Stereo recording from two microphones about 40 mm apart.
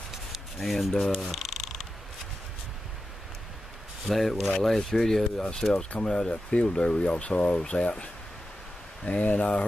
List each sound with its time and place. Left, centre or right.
0.1 s a sound: centre
1.0 s speech: centre
4.1 s speech: centre; by 9.7 s left